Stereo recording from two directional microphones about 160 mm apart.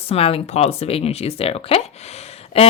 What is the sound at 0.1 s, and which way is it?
Speech, 35° left (ahead or behind).